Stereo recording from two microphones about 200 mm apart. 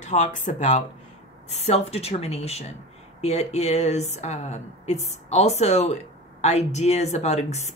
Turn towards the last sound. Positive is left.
turn(degrees=35)  # may be behind; listen again after turning